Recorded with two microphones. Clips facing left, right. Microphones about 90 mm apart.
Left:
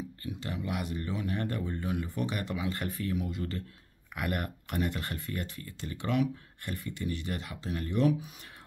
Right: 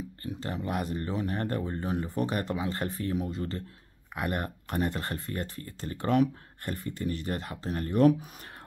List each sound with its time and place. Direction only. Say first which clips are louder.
0.2 s speech: right 3 dB; 35° right (ahead or behind)